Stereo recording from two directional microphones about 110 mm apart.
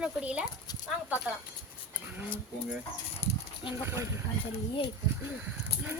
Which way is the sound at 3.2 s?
75° left (ahead or behind).